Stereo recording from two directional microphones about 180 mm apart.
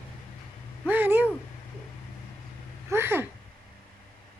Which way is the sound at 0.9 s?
10° right (ahead or behind).